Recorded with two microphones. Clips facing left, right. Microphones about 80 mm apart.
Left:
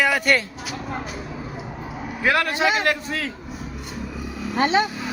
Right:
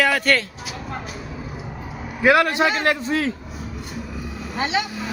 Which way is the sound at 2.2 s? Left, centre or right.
Right.